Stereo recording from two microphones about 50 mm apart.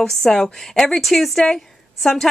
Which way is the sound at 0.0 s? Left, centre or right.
Centre.